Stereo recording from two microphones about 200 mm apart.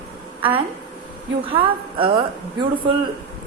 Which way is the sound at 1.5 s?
25° right (ahead or behind).